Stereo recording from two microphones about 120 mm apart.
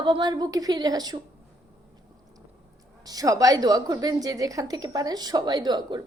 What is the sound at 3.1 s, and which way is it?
A woman's voice, 30° right (ahead or behind).